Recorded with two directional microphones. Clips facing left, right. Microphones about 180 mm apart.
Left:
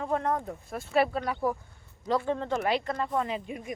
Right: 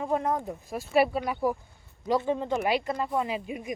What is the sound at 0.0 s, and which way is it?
Speech, 10° right (ahead or behind).